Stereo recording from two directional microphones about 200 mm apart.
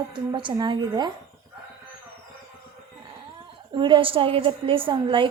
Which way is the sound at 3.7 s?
25° right (ahead or behind).